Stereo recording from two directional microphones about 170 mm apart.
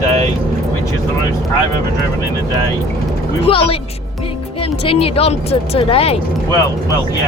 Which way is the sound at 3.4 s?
35° left (ahead or behind).